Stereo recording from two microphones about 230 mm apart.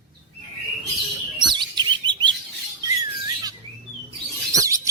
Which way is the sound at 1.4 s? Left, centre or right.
Centre.